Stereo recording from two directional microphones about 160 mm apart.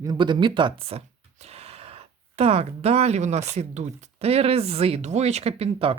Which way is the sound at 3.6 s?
45° right (ahead or behind).